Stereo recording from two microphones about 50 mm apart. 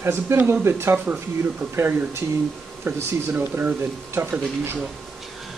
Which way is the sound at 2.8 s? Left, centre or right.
Right.